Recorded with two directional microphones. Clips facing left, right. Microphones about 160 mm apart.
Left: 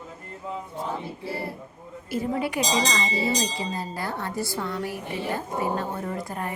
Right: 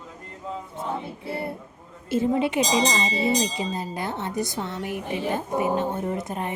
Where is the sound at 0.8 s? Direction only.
25° right (ahead or behind).